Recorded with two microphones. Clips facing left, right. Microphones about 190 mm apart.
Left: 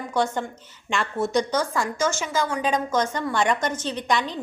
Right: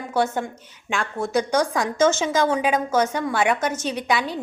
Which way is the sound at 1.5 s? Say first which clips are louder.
Right 3 dB; 15° right (ahead or behind).